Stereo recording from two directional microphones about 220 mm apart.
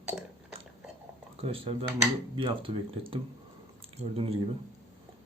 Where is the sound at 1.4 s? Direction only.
25° right (ahead or behind).